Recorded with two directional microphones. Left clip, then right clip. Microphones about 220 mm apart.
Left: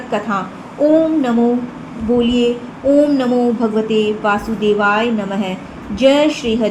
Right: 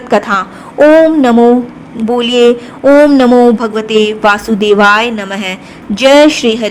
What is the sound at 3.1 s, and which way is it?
A woman's voice, 50° right (ahead or behind).